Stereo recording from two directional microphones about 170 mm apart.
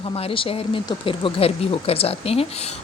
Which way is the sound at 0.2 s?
35° left (ahead or behind).